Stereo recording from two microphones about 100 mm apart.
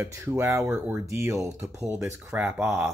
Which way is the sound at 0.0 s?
30° right (ahead or behind).